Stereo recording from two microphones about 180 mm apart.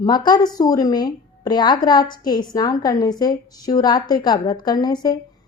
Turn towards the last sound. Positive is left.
turn(degrees=20)  # may be behind; listen again after turning